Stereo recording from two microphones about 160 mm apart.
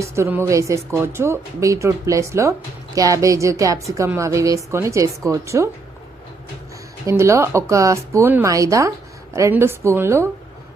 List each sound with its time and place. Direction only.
0.0 s a woman's voice: 15° right (ahead or behind)
7.0 s a woman's voice: 20° right (ahead or behind)